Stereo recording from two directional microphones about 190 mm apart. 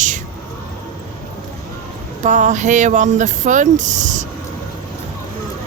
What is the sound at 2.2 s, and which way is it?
Speech, 40° right (ahead or behind).